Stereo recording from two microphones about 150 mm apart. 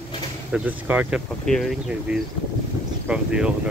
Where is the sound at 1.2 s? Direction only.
5° left (ahead or behind).